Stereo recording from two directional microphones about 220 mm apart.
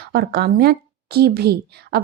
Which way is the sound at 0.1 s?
45° right (ahead or behind).